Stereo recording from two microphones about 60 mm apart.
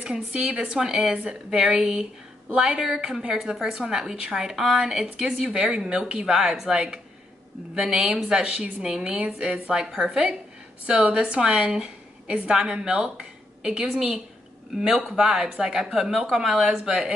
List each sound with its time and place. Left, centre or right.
0.0 s a woman's voice: centre